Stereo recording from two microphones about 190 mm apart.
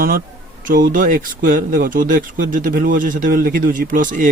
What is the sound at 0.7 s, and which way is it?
Speech, 50° right (ahead or behind).